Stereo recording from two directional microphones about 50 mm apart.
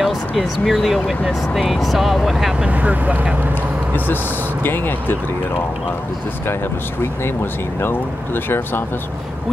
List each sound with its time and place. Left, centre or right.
0.0 s speech: centre
2.6 s speech: right
4.6 s speech: left
8.5 s speech: left